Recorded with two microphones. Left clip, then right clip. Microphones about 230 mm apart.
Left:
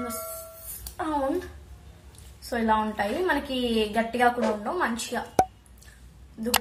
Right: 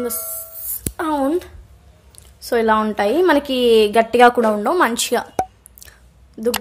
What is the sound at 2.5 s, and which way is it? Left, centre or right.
A woman's voice, right.